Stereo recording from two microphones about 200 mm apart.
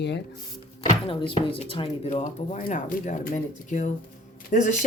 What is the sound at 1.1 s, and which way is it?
Speech, 25° left (ahead or behind).